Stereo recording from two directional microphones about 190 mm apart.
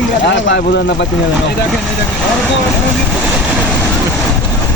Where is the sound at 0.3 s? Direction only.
70° left (ahead or behind).